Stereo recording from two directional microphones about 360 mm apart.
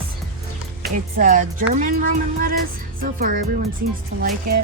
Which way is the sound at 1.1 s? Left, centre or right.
Right.